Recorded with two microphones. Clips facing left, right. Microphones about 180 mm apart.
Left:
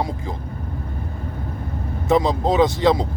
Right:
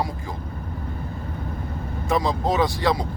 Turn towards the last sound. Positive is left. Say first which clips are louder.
# left 5 dB
turn(degrees=20)  # may be behind; listen again after turning